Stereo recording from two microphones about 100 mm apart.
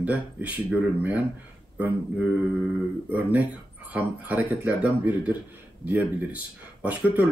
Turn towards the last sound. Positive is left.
turn(degrees=-15)  # may be behind; listen again after turning